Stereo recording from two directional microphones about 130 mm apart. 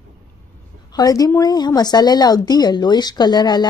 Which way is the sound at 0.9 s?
30° left (ahead or behind).